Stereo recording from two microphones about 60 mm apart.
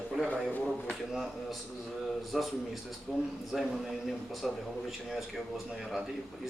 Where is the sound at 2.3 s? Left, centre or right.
Centre.